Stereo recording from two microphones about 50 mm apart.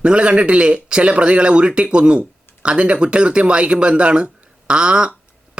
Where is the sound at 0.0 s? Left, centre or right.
Right.